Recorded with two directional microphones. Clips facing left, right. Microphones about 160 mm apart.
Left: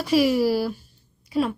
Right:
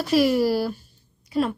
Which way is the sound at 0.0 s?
10° left (ahead or behind).